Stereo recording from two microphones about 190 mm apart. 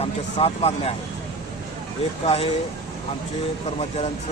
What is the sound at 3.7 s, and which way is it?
Speech, 35° left (ahead or behind).